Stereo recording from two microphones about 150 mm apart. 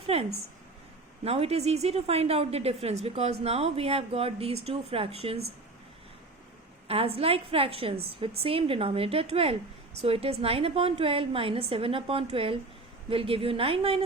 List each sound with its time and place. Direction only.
0.1 s a woman's voice: 40° right (ahead or behind)
6.8 s a woman's voice: 40° right (ahead or behind)